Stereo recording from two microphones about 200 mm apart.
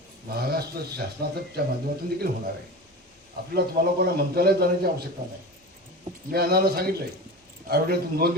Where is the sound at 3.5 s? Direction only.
50° right (ahead or behind).